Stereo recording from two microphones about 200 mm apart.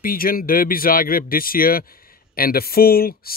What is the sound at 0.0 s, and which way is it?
Speech, 45° left (ahead or behind).